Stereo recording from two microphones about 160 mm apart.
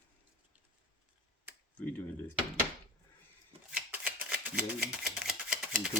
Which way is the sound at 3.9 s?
5° right (ahead or behind).